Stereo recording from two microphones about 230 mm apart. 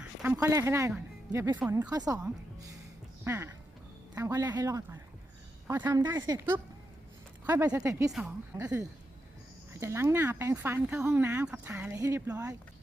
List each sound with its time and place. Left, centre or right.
0.0 s speech: centre
3.2 s speech: centre